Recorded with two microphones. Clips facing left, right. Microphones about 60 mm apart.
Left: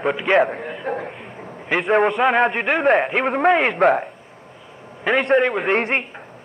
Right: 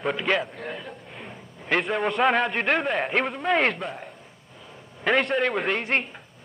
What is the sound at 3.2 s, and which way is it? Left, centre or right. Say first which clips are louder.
Speech: left 6 dB; left.